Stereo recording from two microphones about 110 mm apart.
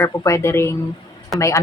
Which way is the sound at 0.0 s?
25° left (ahead or behind).